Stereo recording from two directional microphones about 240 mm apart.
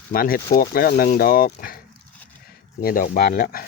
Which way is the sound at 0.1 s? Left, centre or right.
Left.